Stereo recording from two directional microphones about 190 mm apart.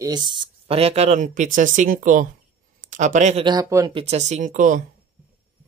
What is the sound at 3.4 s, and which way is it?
Speech, 20° right (ahead or behind).